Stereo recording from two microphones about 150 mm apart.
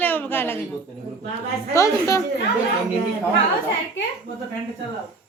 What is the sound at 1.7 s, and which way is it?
Speech, 20° left (ahead or behind).